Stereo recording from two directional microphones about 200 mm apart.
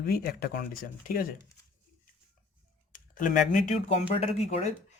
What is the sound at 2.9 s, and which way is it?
Speech, 40° left (ahead or behind).